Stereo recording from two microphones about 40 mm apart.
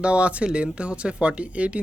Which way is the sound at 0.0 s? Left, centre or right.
Right.